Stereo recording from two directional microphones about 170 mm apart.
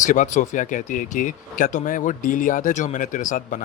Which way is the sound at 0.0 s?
50° left (ahead or behind).